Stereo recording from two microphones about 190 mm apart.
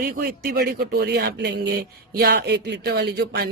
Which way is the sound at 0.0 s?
50° right (ahead or behind).